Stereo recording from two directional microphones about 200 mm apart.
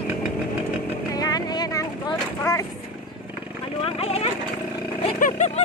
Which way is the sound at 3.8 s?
30° left (ahead or behind).